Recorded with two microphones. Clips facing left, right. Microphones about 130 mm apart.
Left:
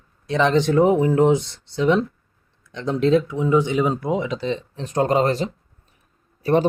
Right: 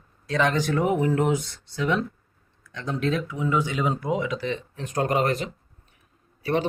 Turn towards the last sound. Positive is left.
turn(degrees=40)  # may be behind; listen again after turning